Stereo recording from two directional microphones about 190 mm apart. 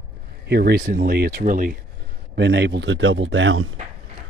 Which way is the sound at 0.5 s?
60° right (ahead or behind).